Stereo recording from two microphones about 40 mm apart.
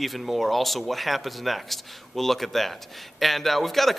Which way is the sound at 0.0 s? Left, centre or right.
Centre.